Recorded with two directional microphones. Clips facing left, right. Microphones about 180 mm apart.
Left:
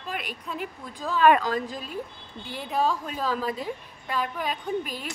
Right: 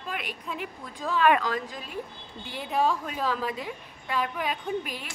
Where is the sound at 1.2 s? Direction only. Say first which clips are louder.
Left 3 dB; 35° left (ahead or behind).